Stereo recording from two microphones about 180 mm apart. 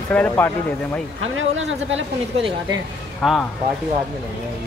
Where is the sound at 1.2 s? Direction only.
90° right.